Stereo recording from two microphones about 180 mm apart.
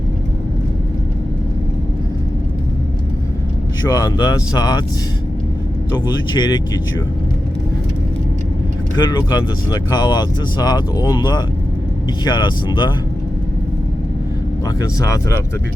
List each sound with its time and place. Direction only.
3.8 s speech: 20° left (ahead or behind)
5.9 s speech: 20° left (ahead or behind)
9.0 s speech: 20° left (ahead or behind)
14.8 s speech: 15° left (ahead or behind)